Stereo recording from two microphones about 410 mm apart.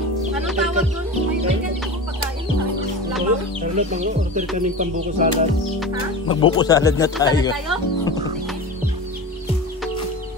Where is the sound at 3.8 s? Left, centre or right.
Centre.